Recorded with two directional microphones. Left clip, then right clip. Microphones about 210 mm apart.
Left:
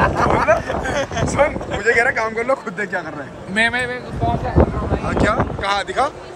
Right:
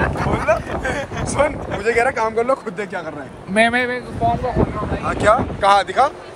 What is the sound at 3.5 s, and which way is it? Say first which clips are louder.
Speech: right 2 dB; 35° right (ahead or behind).